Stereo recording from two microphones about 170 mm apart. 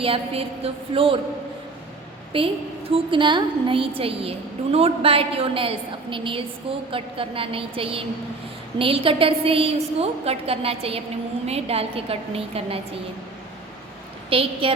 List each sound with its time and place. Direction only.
0.0 s a woman's voice: 35° right (ahead or behind)
2.3 s a woman's voice: 30° right (ahead or behind)
14.3 s a woman's voice: 30° right (ahead or behind)